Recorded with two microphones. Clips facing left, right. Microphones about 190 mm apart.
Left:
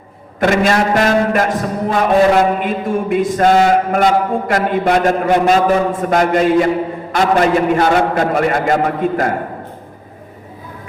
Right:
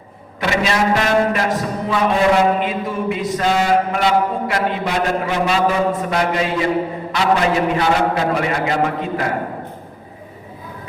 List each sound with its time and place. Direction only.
0.3 s mantra: 50° left (ahead or behind)